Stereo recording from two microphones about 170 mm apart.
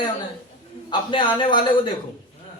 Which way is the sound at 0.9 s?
30° left (ahead or behind).